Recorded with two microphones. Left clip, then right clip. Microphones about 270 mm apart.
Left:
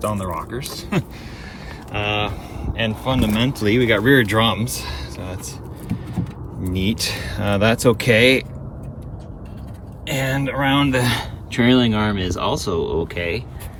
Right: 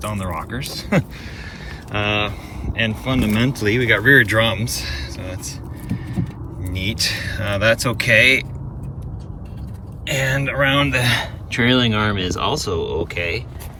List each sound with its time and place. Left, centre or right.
0.0 s speech: centre
10.1 s speech: centre